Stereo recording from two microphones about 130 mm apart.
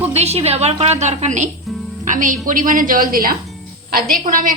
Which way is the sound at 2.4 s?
90° right.